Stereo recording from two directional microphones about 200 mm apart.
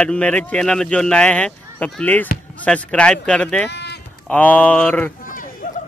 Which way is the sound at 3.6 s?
55° left (ahead or behind).